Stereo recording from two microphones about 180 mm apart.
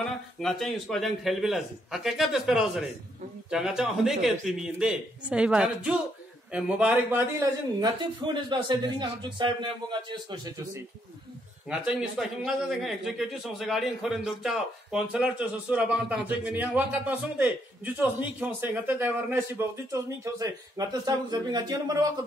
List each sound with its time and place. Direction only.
0.4 s a man's voice: centre (ahead or behind)
7.8 s speech: 25° right (ahead or behind)
11.7 s speech: 5° right (ahead or behind); by 21.9 s 20° right (ahead or behind)